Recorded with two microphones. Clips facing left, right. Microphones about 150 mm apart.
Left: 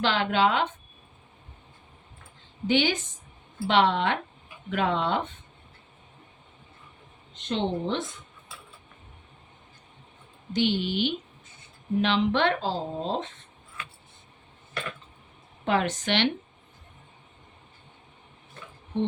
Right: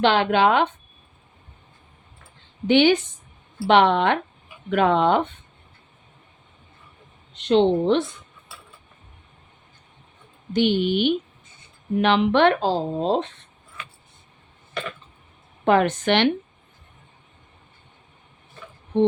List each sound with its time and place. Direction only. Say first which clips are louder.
0.0 s speech: right 6 dB; 65° right (ahead or behind)
2.6 s speech: right 8 dB; 65° right (ahead or behind)
7.3 s speech: right 11 dB; 70° right (ahead or behind)
10.5 s speech: right 6 dB; 55° right (ahead or behind); by 13.3 s 70° right (ahead or behind)
15.6 s speech: right 7 dB; 55° right (ahead or behind)